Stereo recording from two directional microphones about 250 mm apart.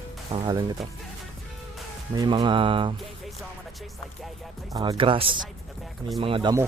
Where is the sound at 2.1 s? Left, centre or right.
Centre.